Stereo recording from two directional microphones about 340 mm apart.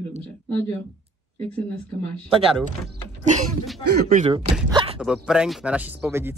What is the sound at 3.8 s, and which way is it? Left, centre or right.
Speech, right.